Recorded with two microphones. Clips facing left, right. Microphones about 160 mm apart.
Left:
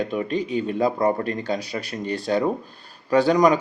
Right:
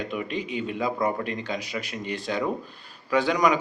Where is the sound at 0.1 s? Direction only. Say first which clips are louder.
Left 6 dB; 35° left (ahead or behind).